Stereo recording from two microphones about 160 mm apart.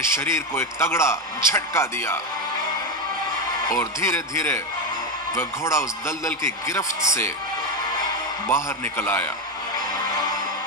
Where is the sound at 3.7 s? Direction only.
15° left (ahead or behind).